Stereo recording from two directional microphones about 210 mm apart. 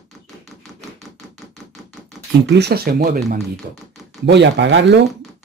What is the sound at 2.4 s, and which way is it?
Speech, 55° right (ahead or behind).